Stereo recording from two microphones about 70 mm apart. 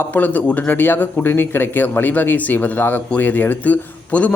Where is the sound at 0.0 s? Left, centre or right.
Left.